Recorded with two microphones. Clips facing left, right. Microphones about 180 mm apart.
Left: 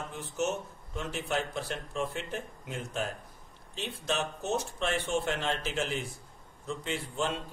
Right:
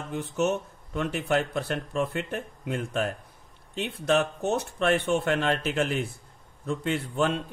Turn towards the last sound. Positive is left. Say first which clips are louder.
# right 7 dB
turn(degrees=-60)  # may be behind; listen again after turning